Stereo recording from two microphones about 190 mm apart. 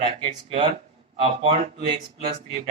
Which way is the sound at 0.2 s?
30° right (ahead or behind).